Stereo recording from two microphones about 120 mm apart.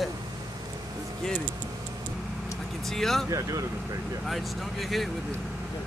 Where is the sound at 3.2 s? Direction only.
30° right (ahead or behind).